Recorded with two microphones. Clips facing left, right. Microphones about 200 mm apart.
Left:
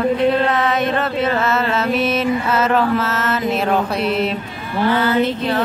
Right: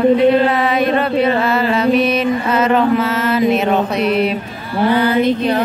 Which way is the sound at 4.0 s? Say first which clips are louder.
Right 4 dB; 25° left (ahead or behind).